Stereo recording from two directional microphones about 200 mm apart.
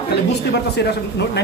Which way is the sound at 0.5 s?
55° left (ahead or behind).